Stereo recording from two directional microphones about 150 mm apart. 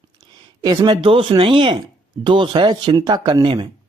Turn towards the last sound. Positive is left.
turn(degrees=-35)  # may be behind; listen again after turning